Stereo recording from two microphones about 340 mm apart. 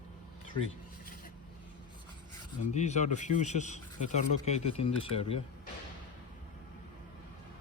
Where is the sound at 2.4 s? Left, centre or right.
Centre.